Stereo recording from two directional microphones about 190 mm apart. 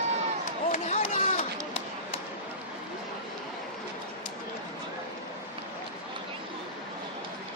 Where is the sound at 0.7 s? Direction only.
35° left (ahead or behind).